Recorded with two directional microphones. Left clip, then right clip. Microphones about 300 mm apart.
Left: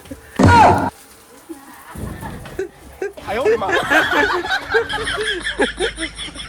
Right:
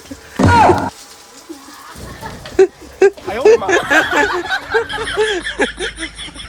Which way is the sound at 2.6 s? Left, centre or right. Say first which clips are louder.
Right 16 dB; right.